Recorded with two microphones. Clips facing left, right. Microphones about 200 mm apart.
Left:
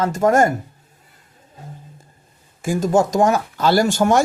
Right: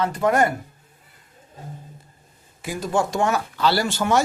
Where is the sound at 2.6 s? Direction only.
45° left (ahead or behind).